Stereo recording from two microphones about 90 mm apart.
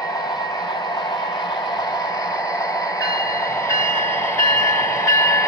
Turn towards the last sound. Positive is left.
turn(degrees=30)  # may be behind; listen again after turning